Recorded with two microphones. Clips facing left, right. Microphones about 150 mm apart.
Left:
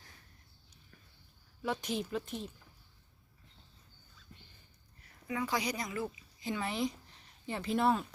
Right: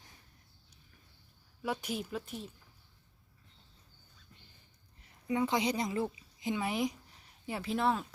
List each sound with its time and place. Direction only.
1.6 s speech: 10° right (ahead or behind)
5.0 s speech: 25° right (ahead or behind)
6.4 s a woman's voice: 15° right (ahead or behind); by 8.0 s centre (ahead or behind)